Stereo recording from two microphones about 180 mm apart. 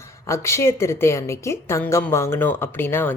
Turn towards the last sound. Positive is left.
turn(degrees=10)  # may be behind; listen again after turning